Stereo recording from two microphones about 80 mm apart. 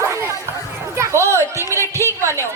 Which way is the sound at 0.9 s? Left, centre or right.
Right.